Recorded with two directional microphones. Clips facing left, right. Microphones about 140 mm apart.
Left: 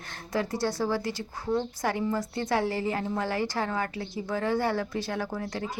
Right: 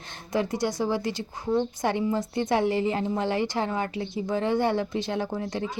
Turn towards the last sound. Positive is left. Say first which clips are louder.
# right 3 dB
turn(degrees=-20)  # may be behind; listen again after turning